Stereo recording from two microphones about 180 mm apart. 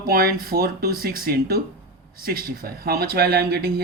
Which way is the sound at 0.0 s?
55° right (ahead or behind).